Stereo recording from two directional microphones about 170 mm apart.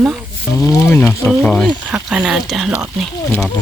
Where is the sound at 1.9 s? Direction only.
5° right (ahead or behind).